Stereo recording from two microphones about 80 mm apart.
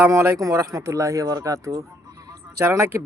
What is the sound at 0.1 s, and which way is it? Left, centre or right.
Speech, right.